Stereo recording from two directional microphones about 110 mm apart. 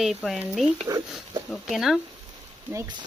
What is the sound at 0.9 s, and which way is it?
Speech, 40° right (ahead or behind).